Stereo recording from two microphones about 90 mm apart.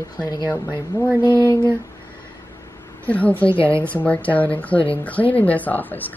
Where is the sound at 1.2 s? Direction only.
55° left (ahead or behind).